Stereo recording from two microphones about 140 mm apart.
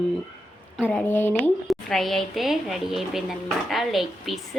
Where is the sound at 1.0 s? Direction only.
15° left (ahead or behind).